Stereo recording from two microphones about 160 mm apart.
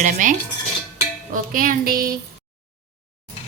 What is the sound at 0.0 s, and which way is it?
Cutlery, 55° right (ahead or behind).